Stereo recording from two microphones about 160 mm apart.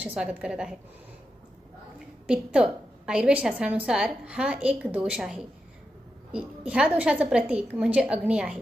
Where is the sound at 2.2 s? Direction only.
5° right (ahead or behind).